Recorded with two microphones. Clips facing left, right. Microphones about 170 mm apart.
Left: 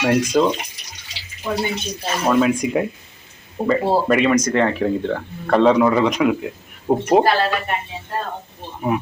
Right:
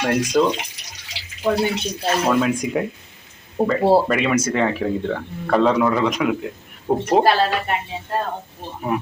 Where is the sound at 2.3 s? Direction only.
Centre (ahead or behind).